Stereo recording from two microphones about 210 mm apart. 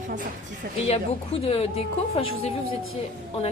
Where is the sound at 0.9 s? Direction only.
30° left (ahead or behind).